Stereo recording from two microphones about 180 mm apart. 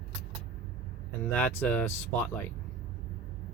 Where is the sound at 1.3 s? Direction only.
10° left (ahead or behind).